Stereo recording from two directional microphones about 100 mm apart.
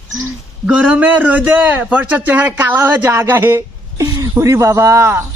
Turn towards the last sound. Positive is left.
turn(degrees=-25)  # may be behind; listen again after turning